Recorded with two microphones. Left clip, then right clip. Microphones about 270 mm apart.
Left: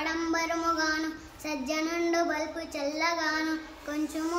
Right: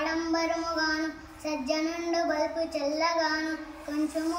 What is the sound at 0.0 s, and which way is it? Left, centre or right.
Child singing, centre.